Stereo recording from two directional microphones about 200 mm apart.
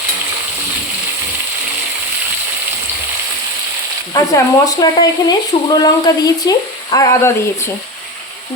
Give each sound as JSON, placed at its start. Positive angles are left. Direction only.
{"t": 4.1, "sound": "speech", "side_deg": 20}